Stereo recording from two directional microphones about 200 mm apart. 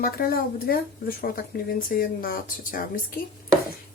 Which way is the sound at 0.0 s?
50° left (ahead or behind).